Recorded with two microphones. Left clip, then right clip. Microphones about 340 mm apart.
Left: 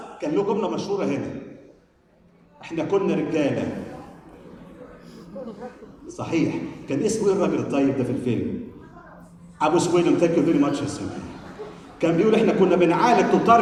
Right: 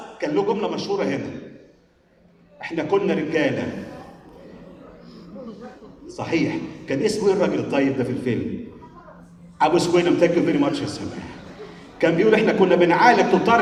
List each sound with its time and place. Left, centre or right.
0.2 s a man's voice: right
2.6 s a man's voice: right
6.1 s a man's voice: right
9.6 s a man's voice: right